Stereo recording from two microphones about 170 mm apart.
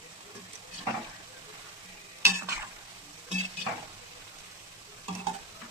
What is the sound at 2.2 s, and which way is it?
Stir, 15° right (ahead or behind).